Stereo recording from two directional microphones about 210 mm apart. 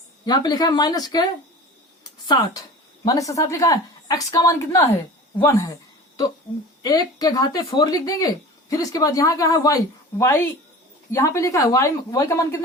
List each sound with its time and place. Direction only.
0.3 s a woman's voice: 20° left (ahead or behind)
6.8 s a woman's voice: 20° left (ahead or behind)